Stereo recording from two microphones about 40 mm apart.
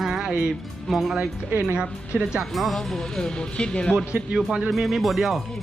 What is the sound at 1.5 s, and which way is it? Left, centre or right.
Speech, right.